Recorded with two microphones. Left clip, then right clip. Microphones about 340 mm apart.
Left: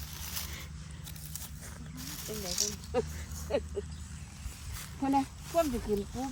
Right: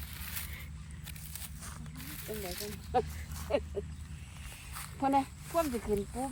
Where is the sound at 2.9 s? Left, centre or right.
Centre.